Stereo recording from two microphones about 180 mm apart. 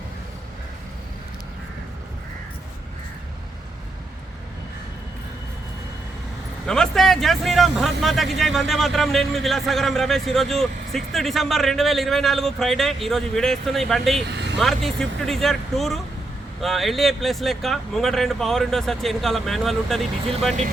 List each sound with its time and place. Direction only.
6.7 s speech: 5° left (ahead or behind)
14.3 s vehicle: 75° right (ahead or behind)
14.6 s speech: centre (ahead or behind)